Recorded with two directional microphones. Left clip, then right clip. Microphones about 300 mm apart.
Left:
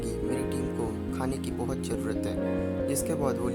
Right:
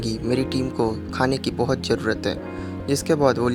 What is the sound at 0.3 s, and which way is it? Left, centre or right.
Speech, left.